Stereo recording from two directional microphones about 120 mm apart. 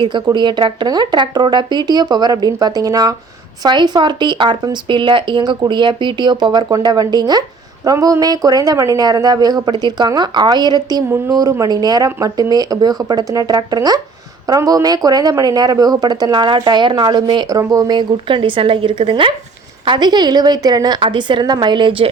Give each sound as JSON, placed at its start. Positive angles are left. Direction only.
{"t": 0.3, "sound": "speech", "side_deg": -40}